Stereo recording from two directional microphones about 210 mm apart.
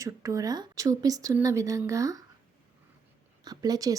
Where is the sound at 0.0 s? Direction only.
15° right (ahead or behind).